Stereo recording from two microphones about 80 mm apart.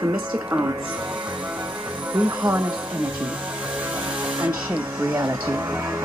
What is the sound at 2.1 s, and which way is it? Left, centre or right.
Music, centre.